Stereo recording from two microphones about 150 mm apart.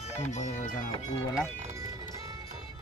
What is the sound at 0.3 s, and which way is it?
Speech, 50° left (ahead or behind).